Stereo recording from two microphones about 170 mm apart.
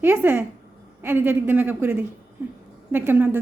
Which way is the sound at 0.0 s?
10° right (ahead or behind).